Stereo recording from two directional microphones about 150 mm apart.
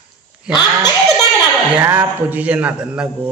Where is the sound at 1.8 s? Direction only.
15° right (ahead or behind).